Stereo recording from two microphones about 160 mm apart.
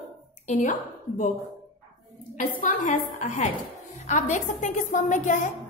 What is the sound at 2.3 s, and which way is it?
A woman's voice, 55° left (ahead or behind).